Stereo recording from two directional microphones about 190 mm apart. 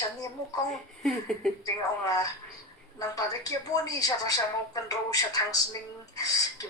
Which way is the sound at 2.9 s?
20° left (ahead or behind).